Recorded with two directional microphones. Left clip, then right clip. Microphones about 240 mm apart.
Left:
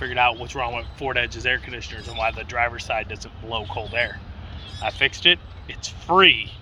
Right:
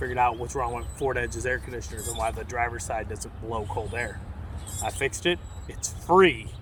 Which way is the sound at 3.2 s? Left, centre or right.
Centre.